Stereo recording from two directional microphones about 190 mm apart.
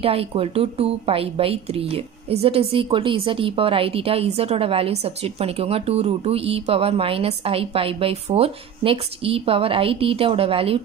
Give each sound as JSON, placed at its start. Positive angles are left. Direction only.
{"t": 0.0, "sound": "a woman's voice", "side_deg": -30}